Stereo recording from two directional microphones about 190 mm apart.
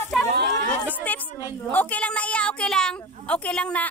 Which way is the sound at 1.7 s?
10° left (ahead or behind).